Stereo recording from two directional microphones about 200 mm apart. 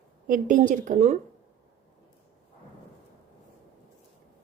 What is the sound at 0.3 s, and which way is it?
Speech, 40° right (ahead or behind).